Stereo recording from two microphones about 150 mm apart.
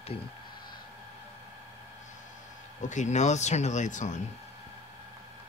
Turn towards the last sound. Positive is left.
turn(degrees=55)  # may be behind; listen again after turning